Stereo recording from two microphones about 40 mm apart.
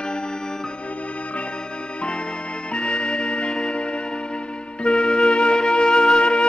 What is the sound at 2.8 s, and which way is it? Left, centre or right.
Music, left.